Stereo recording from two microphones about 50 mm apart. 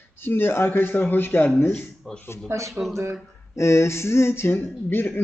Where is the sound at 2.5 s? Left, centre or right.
Right.